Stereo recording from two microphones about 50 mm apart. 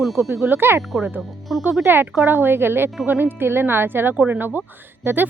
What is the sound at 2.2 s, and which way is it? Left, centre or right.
Speech, right.